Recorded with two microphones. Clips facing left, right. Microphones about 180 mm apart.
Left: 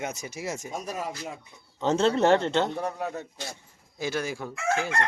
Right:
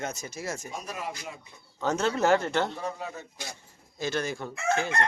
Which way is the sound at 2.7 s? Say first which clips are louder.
Left 4 dB; 60° left (ahead or behind).